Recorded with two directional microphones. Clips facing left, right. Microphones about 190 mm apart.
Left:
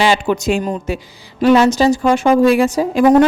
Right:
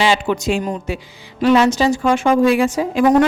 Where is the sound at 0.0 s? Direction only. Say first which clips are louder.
Left 2 dB; 45° left (ahead or behind).